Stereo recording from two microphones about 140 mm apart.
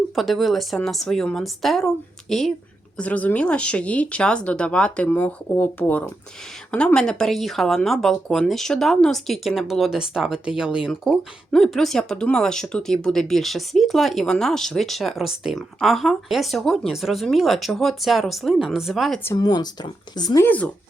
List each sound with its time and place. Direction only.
0.2 s speech: centre (ahead or behind)
3.0 s speech: 10° left (ahead or behind)
19.4 s speech: 30° left (ahead or behind)
20.4 s speech: 10° left (ahead or behind)